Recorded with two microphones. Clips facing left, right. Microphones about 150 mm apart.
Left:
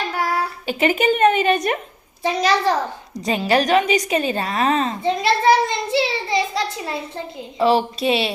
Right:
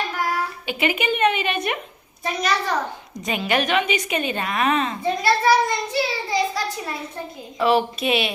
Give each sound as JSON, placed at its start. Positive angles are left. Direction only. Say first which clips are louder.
{"t": 0.7, "sound": "a woman's voice", "louder": "left 5 dB", "side_deg": 40}
{"t": 5.2, "sound": "a child's voice", "louder": "left 1 dB", "side_deg": 25}